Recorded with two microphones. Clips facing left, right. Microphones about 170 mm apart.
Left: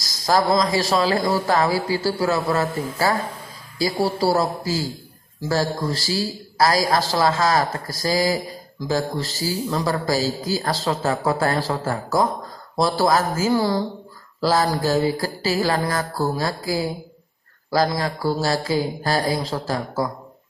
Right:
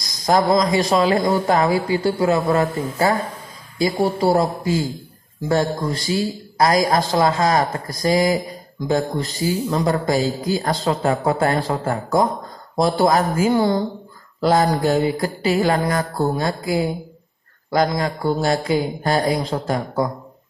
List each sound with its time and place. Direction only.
0.2 s speech: 20° right (ahead or behind)